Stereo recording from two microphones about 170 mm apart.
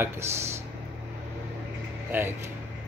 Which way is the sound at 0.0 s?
15° right (ahead or behind).